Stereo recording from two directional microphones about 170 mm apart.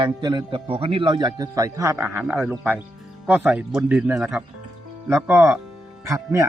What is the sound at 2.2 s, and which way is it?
Speech, centre (ahead or behind).